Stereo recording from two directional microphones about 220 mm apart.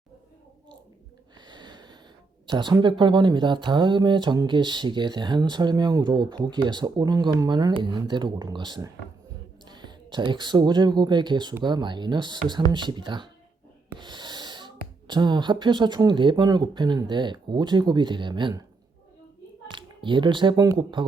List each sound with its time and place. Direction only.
1.5 s snort: 20° right (ahead or behind)
2.5 s speech: 20° right (ahead or behind)
14.0 s snort: 20° right (ahead or behind)
15.0 s speech: 20° right (ahead or behind)
19.7 s speech: 20° right (ahead or behind)